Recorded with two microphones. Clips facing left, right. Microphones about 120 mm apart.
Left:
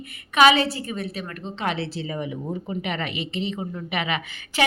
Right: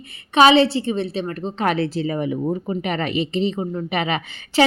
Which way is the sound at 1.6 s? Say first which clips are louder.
Right 7 dB; 50° right (ahead or behind).